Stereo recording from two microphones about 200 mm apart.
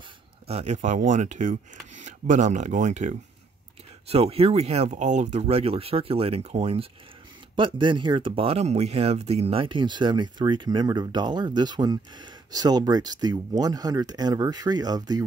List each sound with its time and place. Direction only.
0.5 s speech: 35° right (ahead or behind)